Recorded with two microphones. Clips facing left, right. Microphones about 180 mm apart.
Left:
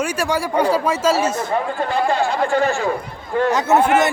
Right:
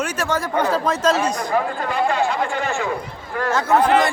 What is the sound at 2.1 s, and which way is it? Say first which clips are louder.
Speech: left 3 dB; 35° left (ahead or behind).